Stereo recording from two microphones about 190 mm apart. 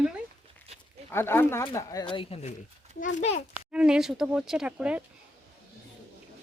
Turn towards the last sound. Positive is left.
turn(degrees=-5)  # may be behind; listen again after turning